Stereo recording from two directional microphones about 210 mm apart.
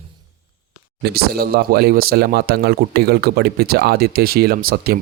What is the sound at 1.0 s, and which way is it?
Speech, 50° right (ahead or behind).